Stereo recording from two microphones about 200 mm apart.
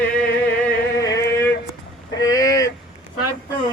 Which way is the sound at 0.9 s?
15° left (ahead or behind).